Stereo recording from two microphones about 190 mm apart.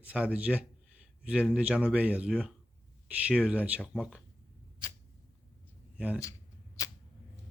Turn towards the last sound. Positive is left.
turn(degrees=15)  # may be behind; listen again after turning